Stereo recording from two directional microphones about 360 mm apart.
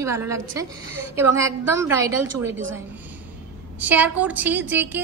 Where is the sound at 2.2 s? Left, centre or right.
Right.